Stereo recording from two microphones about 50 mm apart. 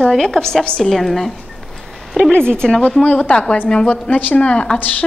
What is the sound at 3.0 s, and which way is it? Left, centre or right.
A woman's voice, left.